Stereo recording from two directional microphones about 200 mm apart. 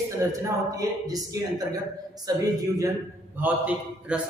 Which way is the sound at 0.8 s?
20° right (ahead or behind).